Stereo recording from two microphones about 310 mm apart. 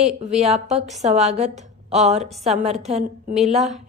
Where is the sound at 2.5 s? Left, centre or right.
Right.